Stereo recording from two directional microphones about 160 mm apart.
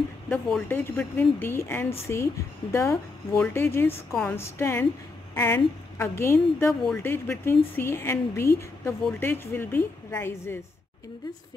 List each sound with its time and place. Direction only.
0.3 s a woman's voice: 10° left (ahead or behind)